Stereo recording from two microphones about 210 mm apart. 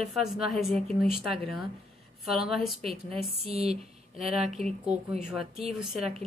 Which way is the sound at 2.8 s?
25° right (ahead or behind).